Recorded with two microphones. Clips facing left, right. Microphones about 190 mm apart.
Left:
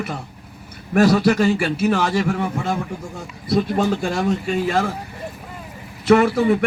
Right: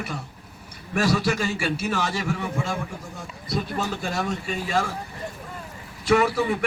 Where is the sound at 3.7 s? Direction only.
50° left (ahead or behind).